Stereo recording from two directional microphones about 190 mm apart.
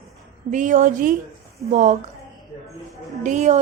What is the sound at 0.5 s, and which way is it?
A woman's voice, 40° right (ahead or behind).